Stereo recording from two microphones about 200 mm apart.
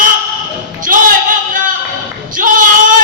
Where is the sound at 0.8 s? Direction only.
40° right (ahead or behind).